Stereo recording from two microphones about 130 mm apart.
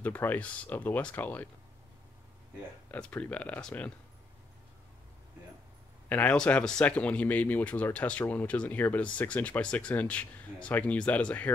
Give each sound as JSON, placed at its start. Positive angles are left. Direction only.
{"t": 0.0, "sound": "speech", "side_deg": 15}
{"t": 2.9, "sound": "speech", "side_deg": 10}
{"t": 6.0, "sound": "speech", "side_deg": 10}